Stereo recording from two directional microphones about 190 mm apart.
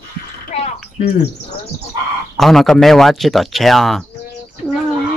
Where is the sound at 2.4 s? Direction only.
Centre (ahead or behind).